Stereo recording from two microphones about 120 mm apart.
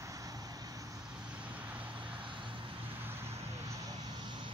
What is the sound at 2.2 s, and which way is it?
Vehicle, 45° right (ahead or behind).